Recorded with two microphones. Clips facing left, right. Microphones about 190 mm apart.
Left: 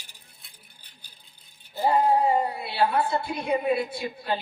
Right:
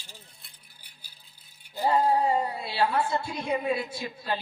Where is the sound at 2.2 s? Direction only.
60° left (ahead or behind).